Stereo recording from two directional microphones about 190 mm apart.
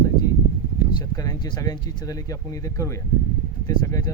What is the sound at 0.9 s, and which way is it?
Speech, 20° left (ahead or behind).